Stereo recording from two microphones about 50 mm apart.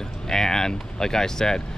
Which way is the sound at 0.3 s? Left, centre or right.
Centre.